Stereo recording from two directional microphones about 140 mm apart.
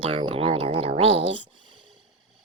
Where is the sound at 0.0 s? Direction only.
40° right (ahead or behind).